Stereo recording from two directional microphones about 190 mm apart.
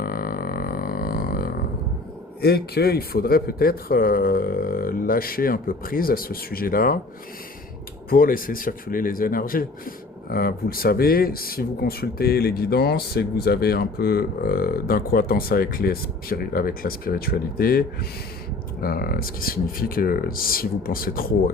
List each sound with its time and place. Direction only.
0.0 s didgeridoo: 50° left (ahead or behind)
2.4 s speech: 55° left (ahead or behind)
8.1 s speech: 50° left (ahead or behind)